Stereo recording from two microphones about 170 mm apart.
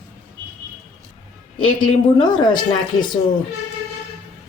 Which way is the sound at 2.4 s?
25° left (ahead or behind).